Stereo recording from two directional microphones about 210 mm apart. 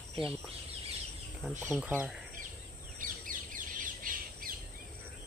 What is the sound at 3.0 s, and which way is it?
Bird, 40° right (ahead or behind).